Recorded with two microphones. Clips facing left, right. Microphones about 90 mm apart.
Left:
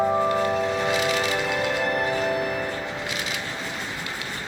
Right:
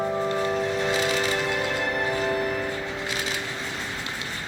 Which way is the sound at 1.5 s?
5° left (ahead or behind).